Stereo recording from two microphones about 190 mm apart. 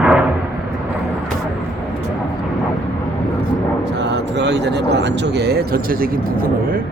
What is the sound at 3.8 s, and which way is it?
Speech, 65° right (ahead or behind).